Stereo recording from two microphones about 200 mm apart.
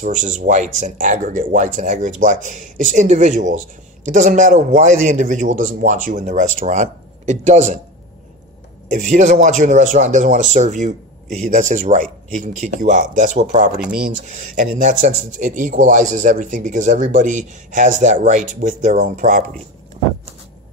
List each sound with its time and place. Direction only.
0.0 s speech: 40° right (ahead or behind)
8.9 s speech: 35° right (ahead or behind)